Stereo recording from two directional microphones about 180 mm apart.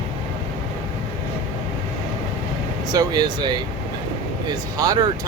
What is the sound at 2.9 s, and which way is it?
Speech, 20° right (ahead or behind).